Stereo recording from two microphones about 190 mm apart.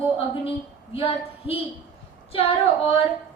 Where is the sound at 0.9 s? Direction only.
30° left (ahead or behind).